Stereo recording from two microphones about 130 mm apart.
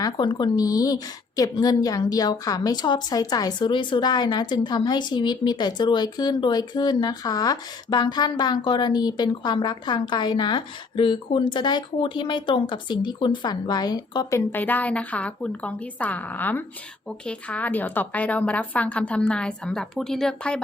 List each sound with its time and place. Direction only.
0.0 s speech: 35° left (ahead or behind)
14.3 s a woman's voice: 15° left (ahead or behind)